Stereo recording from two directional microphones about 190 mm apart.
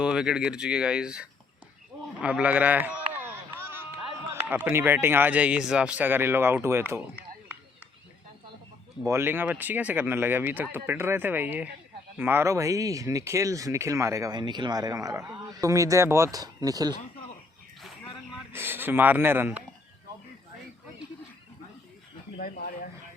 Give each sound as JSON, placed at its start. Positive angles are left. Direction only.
{"t": 0.0, "sound": "speech", "side_deg": -5}
{"t": 9.0, "sound": "speech", "side_deg": -10}
{"t": 18.5, "sound": "speech", "side_deg": -10}
{"t": 22.4, "sound": "speech", "side_deg": 50}